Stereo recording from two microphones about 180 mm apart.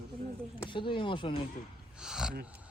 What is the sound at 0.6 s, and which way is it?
Speech, 25° left (ahead or behind).